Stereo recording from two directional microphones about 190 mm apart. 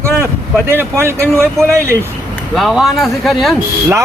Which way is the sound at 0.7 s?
10° right (ahead or behind).